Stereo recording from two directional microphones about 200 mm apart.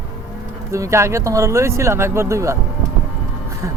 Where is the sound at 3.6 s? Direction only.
15° right (ahead or behind).